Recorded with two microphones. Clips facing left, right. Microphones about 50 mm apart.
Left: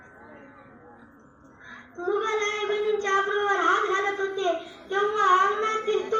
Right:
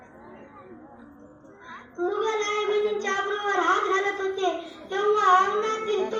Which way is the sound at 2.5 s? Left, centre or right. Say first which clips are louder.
Right 1 dB; centre.